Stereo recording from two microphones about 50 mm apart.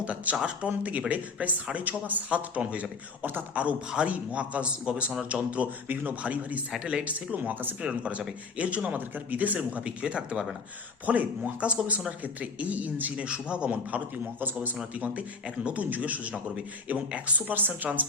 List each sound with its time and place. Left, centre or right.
0.0 s a man's voice: right
2.6 s a man's voice: right
3.2 s a man's voice: right
3.5 s a man's voice: right
7.0 s speech: right
7.8 s a man's voice: right
13.2 s a man's voice: right
14.8 s a man's voice: right